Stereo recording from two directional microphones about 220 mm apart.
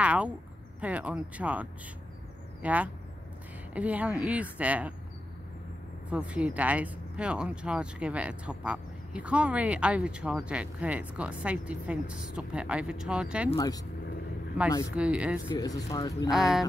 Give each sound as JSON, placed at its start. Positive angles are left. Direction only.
{"t": 0.0, "sound": "a woman's voice", "side_deg": -5}
{"t": 6.0, "sound": "speech", "side_deg": -5}
{"t": 13.6, "sound": "speech", "side_deg": 15}
{"t": 15.0, "sound": "speech", "side_deg": -5}
{"t": 15.5, "sound": "speech", "side_deg": 15}
{"t": 16.3, "sound": "speech", "side_deg": 0}